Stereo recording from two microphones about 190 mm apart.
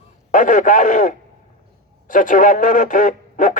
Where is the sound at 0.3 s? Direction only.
40° left (ahead or behind).